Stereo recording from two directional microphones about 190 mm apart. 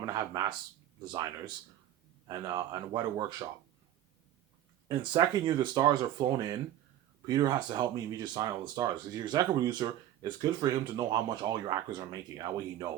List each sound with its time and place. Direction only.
0.0 s speech: 20° right (ahead or behind)
4.9 s speech: 20° right (ahead or behind)